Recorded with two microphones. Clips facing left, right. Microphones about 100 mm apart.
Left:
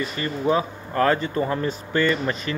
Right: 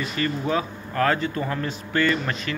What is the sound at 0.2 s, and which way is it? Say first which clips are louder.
A man's voice: left 2 dB; 25° left (ahead or behind).